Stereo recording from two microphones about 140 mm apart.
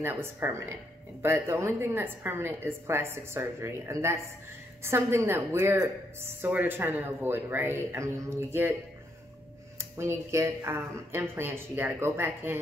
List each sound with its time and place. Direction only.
0.0 s a woman's voice: 15° right (ahead or behind)
9.9 s a woman's voice: 20° right (ahead or behind)